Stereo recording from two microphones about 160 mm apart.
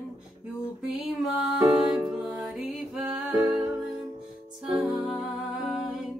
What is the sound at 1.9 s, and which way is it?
Music, 5° right (ahead or behind).